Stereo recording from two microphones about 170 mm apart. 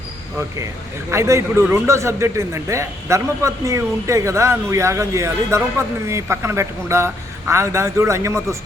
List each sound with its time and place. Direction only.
1.1 s speech: 15° right (ahead or behind)